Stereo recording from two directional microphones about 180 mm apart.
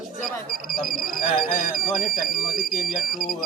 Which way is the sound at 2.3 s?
Centre (ahead or behind).